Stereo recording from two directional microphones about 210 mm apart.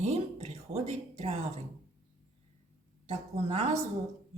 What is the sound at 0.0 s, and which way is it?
Speech, 30° right (ahead or behind).